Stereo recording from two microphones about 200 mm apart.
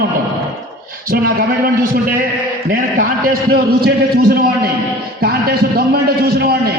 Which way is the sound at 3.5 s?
50° right (ahead or behind).